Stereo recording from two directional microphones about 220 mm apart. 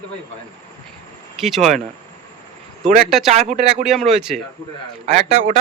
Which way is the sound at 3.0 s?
Centre (ahead or behind).